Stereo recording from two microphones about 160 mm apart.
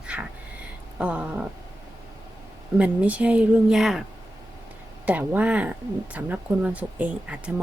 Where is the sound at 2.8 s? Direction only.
10° right (ahead or behind).